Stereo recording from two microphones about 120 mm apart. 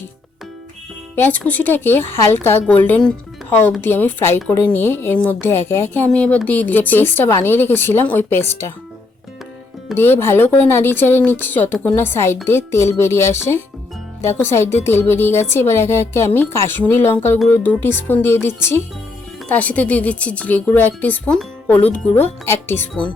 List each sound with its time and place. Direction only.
1.1 s speech: 15° left (ahead or behind)
9.9 s a woman's voice: 20° left (ahead or behind)